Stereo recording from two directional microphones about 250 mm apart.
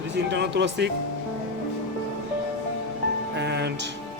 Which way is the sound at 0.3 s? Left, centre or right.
Right.